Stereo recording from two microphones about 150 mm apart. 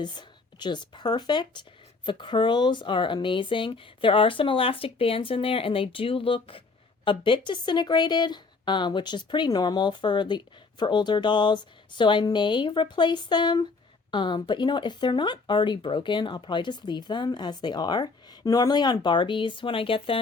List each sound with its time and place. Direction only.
0.0 s speech: 30° left (ahead or behind)